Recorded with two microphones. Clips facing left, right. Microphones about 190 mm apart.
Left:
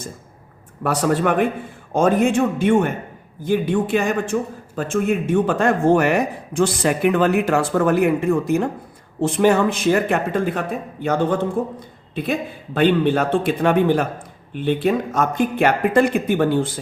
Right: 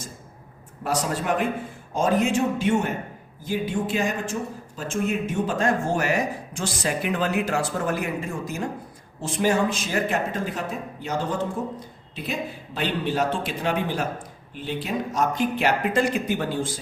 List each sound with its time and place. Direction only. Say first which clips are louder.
0.8 s speech: left 7 dB; 60° left (ahead or behind)